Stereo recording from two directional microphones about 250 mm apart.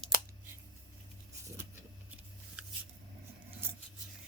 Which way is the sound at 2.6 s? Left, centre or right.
Centre.